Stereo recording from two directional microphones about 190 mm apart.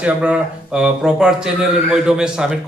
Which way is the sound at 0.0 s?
5° right (ahead or behind).